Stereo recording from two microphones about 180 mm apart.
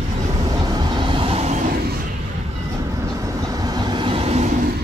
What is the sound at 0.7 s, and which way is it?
Vehicle, 25° right (ahead or behind).